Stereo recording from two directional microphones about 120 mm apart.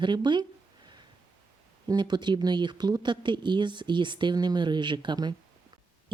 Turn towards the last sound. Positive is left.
turn(degrees=-40)  # may be behind; listen again after turning